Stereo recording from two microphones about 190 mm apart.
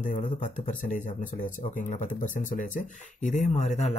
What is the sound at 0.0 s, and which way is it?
A man's voice, 40° left (ahead or behind).